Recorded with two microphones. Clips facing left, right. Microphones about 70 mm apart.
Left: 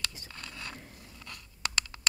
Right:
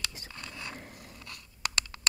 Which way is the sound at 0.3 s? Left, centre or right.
Centre.